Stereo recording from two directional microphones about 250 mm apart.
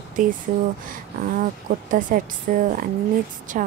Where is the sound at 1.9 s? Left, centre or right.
Right.